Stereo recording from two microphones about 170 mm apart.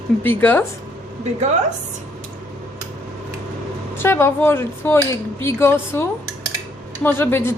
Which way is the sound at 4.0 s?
15° left (ahead or behind).